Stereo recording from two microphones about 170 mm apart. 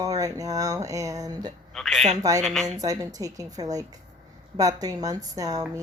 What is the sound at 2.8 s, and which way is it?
Speech, 20° right (ahead or behind).